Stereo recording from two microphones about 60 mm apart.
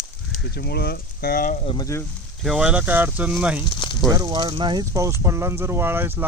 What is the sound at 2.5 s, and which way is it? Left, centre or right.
Speech, centre.